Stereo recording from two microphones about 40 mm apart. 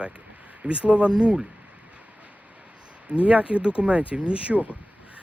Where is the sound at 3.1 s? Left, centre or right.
Right.